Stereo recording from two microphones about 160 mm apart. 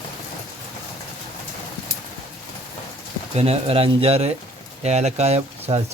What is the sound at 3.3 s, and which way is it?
Speech, 40° right (ahead or behind).